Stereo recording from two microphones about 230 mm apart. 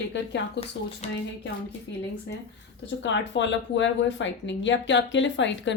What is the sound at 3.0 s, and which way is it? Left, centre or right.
Speech, left.